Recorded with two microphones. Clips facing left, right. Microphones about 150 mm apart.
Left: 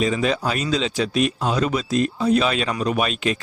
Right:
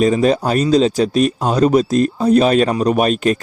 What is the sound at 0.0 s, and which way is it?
Speech, 40° right (ahead or behind).